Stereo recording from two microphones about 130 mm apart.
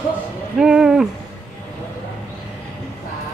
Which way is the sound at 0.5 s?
5° right (ahead or behind).